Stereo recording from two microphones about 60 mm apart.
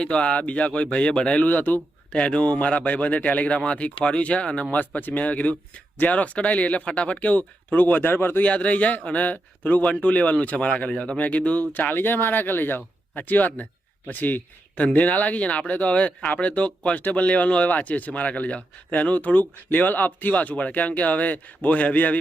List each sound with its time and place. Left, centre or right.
0.0 s speech: centre
1.5 s speech: left
2.1 s speech: centre
4.9 s speech: left
8.4 s speech: left